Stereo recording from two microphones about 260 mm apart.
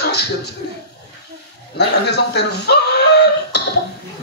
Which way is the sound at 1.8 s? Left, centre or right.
Left.